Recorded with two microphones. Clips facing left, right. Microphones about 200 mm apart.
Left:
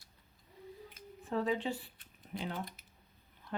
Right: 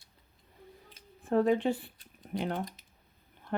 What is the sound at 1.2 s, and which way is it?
Speech, 50° right (ahead or behind).